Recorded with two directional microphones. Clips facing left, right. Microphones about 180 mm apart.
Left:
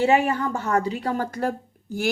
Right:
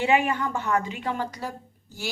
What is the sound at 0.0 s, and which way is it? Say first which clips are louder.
Speech: left 3 dB; 40° left (ahead or behind).